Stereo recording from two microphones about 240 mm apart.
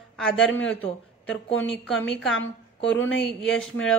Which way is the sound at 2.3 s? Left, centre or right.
Left.